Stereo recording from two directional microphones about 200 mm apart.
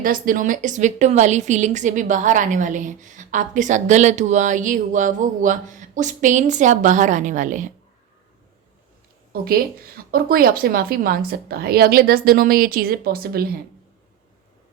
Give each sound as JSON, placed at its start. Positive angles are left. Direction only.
{"t": 0.0, "sound": "a woman's voice", "side_deg": -45}
{"t": 9.3, "sound": "a woman's voice", "side_deg": -50}